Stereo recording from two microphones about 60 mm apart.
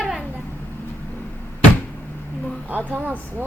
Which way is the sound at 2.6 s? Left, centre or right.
Right.